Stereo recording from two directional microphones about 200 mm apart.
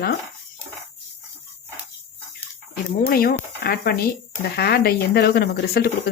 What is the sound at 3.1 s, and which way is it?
Speech, 50° left (ahead or behind).